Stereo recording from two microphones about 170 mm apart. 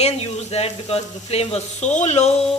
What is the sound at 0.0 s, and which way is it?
Speech, 35° left (ahead or behind).